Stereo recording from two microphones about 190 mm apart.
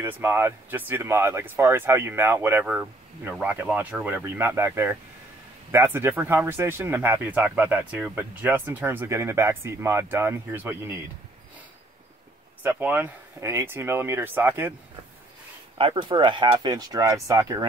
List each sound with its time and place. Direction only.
0.0 s speech: 10° right (ahead or behind)
12.6 s speech: 10° right (ahead or behind)
15.8 s speech: 25° right (ahead or behind)